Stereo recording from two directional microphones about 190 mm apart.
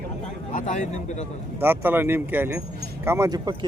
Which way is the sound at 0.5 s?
40° left (ahead or behind).